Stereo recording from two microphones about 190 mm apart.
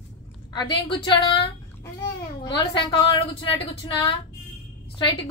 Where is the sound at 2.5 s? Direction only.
25° left (ahead or behind).